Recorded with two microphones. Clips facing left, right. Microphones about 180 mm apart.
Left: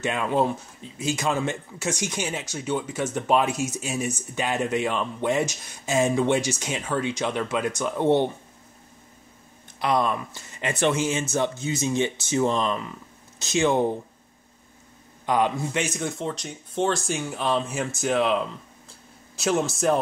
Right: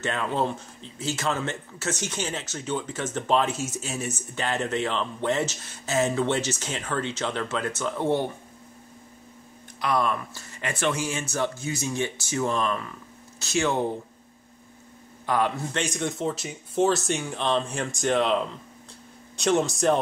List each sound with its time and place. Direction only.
0.0 s speech: 15° left (ahead or behind)
9.8 s speech: 20° left (ahead or behind)
15.2 s speech: 15° left (ahead or behind); by 20.0 s centre (ahead or behind)